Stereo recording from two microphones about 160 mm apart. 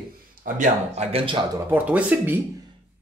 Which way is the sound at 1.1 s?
30° right (ahead or behind).